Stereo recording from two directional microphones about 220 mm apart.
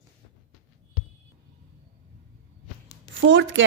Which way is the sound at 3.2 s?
60° right (ahead or behind).